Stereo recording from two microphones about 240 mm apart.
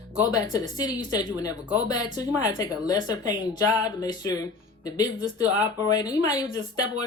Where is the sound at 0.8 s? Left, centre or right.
Centre.